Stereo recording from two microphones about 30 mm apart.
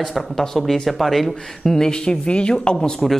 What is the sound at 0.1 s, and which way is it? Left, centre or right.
Speech, centre.